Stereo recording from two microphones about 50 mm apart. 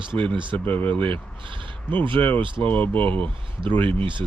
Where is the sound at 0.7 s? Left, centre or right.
Left.